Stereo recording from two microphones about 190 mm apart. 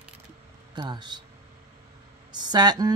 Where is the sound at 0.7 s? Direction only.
20° right (ahead or behind).